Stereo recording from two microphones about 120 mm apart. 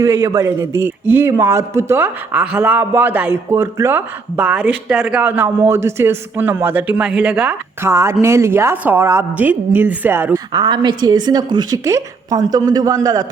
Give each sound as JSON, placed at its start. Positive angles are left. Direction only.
{"t": 0.0, "sound": "a woman's voice", "side_deg": -25}
{"t": 2.3, "sound": "a man's voice", "side_deg": -10}
{"t": 7.9, "sound": "a woman's voice", "side_deg": -25}
{"t": 10.5, "sound": "a woman's voice", "side_deg": -40}